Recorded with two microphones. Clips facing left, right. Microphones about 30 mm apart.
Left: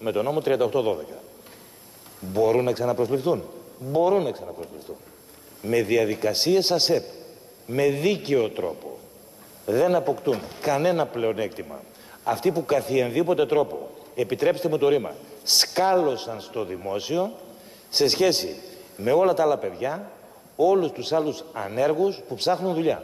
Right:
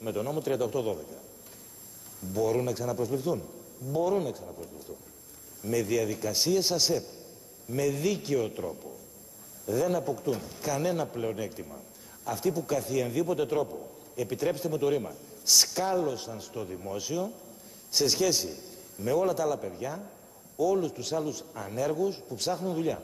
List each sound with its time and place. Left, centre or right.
0.0 s a man's voice: left